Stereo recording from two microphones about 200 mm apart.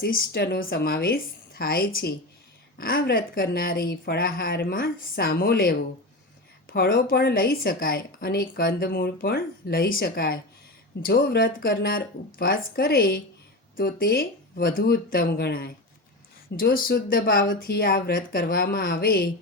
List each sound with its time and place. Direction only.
0.0 s a woman's voice: 50° left (ahead or behind)
6.7 s a woman's voice: 45° left (ahead or behind)